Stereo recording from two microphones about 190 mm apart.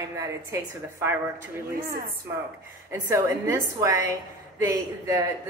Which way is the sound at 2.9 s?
15° right (ahead or behind).